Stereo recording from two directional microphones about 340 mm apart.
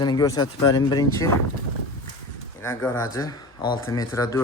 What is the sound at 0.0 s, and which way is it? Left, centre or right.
Speech, centre.